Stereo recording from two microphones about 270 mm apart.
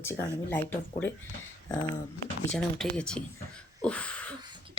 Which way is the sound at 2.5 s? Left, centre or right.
Centre.